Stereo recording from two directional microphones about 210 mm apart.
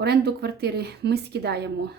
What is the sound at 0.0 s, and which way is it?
Speech, 50° right (ahead or behind).